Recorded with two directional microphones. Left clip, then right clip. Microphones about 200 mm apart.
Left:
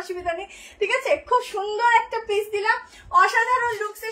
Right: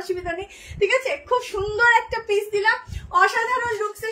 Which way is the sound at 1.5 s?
30° right (ahead or behind).